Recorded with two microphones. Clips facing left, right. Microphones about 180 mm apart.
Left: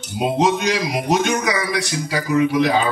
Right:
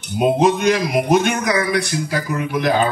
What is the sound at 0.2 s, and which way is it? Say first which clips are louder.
A man's voice: right 3 dB; 60° right (ahead or behind).